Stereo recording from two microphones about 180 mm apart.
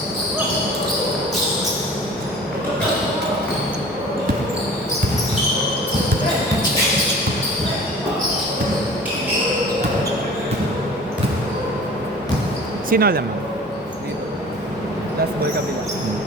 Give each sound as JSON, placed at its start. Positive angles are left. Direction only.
{"t": 12.9, "sound": "speech", "side_deg": -55}